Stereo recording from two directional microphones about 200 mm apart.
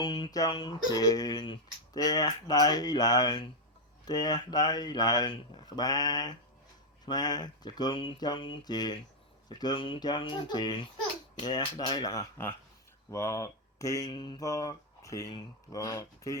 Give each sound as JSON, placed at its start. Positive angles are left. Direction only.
{"t": 0.0, "sound": "speech", "side_deg": 25}